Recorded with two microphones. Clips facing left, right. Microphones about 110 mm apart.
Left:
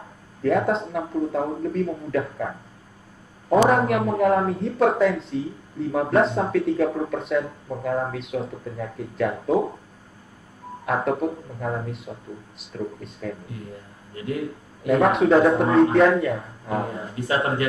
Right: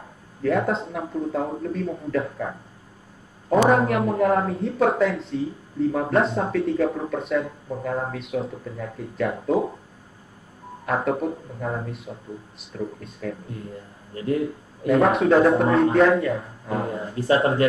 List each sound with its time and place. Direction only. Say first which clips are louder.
0.4 s speech: left 1 dB; centre (ahead or behind)
3.4 s speech: even; 5° left (ahead or behind)
10.9 s speech: even; centre (ahead or behind)
14.9 s speech: even; centre (ahead or behind)
17.1 s speech: right 4 dB; 30° right (ahead or behind)